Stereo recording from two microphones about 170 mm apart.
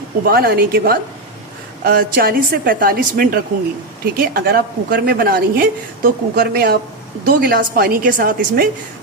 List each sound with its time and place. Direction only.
0.3 s a woman's voice: 65° right (ahead or behind)